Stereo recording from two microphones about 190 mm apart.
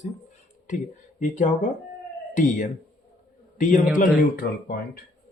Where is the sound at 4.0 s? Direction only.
50° left (ahead or behind).